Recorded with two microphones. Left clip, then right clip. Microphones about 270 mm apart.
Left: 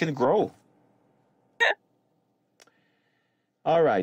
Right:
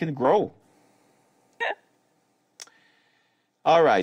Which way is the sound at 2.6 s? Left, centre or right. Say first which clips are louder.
Right 12 dB; right.